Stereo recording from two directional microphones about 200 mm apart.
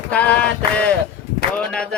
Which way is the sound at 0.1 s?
5° left (ahead or behind).